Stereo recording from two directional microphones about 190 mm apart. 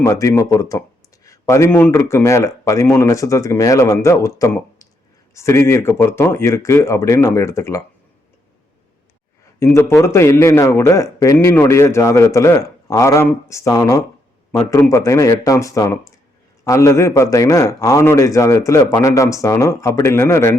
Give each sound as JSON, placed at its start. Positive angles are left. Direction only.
{"t": 0.0, "sound": "a man's voice", "side_deg": 15}
{"t": 9.6, "sound": "a man's voice", "side_deg": 15}